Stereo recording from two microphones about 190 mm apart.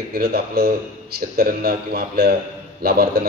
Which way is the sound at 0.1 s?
55° right (ahead or behind).